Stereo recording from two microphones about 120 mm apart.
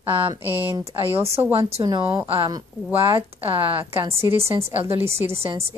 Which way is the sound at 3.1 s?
50° right (ahead or behind).